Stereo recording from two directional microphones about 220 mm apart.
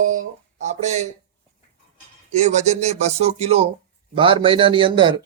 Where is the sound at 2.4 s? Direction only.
30° right (ahead or behind).